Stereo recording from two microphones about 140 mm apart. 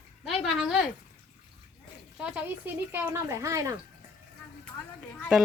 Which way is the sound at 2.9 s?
15° right (ahead or behind).